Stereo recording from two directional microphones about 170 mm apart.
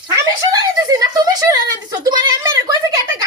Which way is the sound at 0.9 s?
20° right (ahead or behind).